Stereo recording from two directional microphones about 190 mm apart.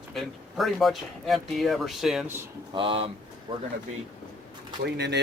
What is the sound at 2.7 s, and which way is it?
Speech, 30° right (ahead or behind).